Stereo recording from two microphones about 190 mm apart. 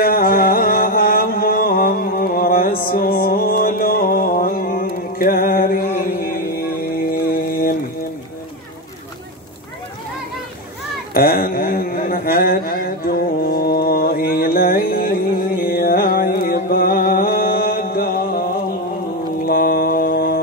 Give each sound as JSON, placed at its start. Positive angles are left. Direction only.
{"t": 0.0, "sound": "music", "side_deg": 50}
{"t": 6.8, "sound": "mantra", "side_deg": 50}
{"t": 11.1, "sound": "mantra", "side_deg": 50}
{"t": 19.4, "sound": "mantra", "side_deg": 50}